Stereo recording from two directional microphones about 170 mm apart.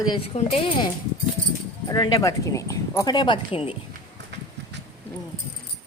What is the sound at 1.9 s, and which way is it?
Speech, 20° left (ahead or behind).